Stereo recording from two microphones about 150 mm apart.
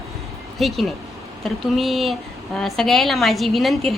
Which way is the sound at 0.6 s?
Centre (ahead or behind).